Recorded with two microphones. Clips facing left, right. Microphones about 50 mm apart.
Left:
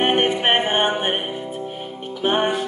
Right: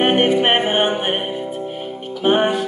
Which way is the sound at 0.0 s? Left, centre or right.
Centre.